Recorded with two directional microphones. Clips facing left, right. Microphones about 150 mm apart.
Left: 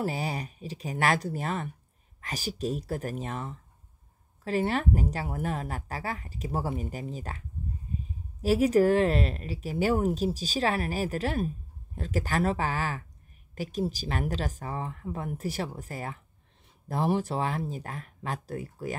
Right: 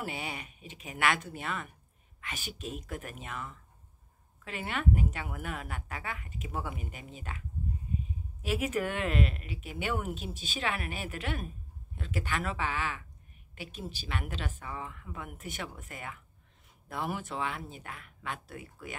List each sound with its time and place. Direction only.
0.0 s speech: 35° left (ahead or behind)
7.9 s a sound: 35° left (ahead or behind)
8.4 s speech: 35° left (ahead or behind)